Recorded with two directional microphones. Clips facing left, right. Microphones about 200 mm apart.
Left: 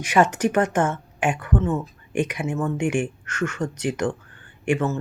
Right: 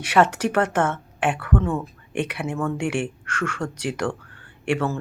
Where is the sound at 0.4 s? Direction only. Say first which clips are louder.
Left 1 dB; 10° left (ahead or behind).